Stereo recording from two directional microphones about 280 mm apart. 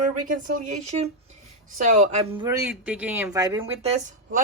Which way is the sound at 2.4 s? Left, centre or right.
Centre.